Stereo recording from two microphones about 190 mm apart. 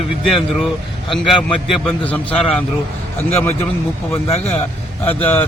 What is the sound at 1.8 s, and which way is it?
Speech, 5° left (ahead or behind).